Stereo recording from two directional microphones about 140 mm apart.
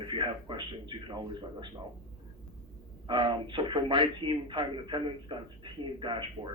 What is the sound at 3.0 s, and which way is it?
A man's voice, 35° right (ahead or behind).